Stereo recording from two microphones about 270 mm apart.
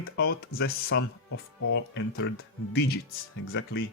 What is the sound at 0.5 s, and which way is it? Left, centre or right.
Speech, left.